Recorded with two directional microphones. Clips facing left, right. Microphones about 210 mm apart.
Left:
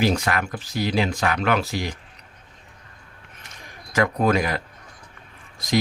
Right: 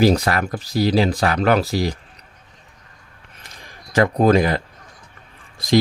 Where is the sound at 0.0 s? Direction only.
35° right (ahead or behind).